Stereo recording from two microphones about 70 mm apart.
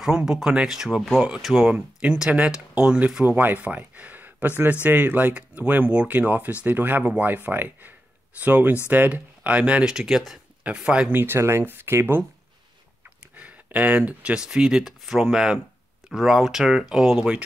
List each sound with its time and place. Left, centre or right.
0.0 s speech: centre
3.3 s speech: right
9.9 s speech: centre
11.1 s speech: right
13.4 s speech: right